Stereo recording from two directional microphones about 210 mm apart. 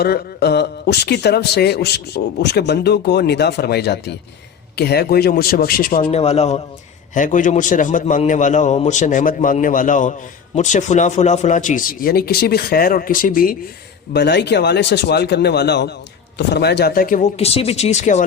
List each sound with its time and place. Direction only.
0.0 s a man's voice: 50° left (ahead or behind)
14.1 s a man's voice: 55° left (ahead or behind); by 18.2 s 35° left (ahead or behind)